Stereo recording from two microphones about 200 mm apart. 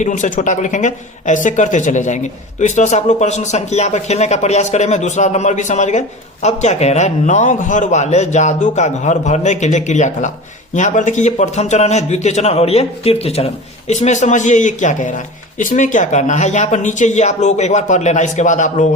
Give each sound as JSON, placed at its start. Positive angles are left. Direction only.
{"t": 0.0, "sound": "speech", "side_deg": 40}